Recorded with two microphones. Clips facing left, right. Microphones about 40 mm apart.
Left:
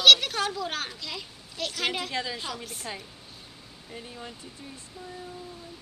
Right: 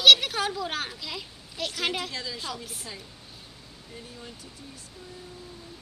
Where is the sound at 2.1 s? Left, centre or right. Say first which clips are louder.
Left 3 dB; left.